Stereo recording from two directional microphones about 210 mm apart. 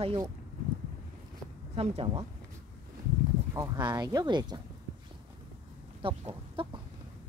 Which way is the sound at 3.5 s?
15° right (ahead or behind).